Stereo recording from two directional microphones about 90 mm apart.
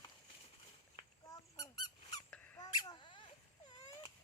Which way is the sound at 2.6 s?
50° left (ahead or behind).